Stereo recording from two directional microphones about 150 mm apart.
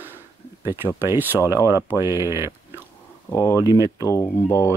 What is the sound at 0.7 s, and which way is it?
Speech, 15° right (ahead or behind).